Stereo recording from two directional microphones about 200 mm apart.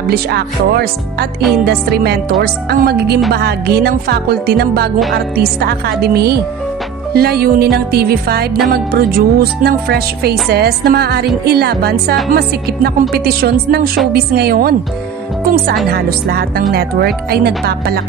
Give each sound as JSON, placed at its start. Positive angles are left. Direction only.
{"t": 0.1, "sound": "speech", "side_deg": -55}
{"t": 15.9, "sound": "speech", "side_deg": -50}